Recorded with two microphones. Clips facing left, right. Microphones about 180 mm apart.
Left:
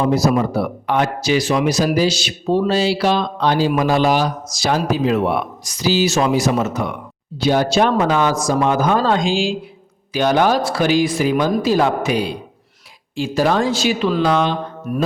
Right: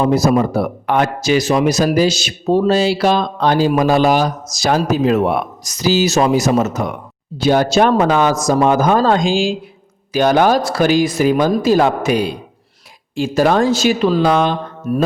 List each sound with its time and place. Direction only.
0.1 s speech: 50° right (ahead or behind)
14.9 s mantra: 30° right (ahead or behind)